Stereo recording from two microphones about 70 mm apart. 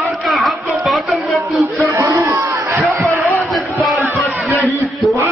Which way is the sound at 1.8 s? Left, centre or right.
Right.